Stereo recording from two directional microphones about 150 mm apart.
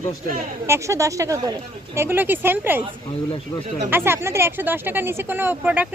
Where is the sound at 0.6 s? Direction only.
20° right (ahead or behind).